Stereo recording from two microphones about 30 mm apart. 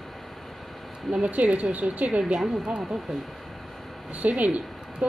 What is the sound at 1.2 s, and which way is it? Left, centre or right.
Speech, right.